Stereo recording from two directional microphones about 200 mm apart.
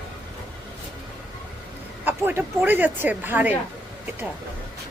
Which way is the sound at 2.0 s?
10° right (ahead or behind).